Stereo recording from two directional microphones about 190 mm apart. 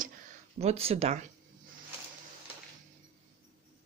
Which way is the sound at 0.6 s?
30° right (ahead or behind).